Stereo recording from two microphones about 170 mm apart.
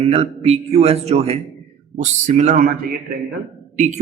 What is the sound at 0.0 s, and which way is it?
A man's voice, 35° right (ahead or behind).